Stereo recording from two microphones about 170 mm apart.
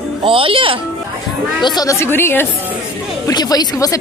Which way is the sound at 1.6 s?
20° left (ahead or behind).